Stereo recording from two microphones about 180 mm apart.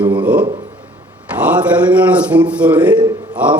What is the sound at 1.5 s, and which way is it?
A man's voice, 10° right (ahead or behind).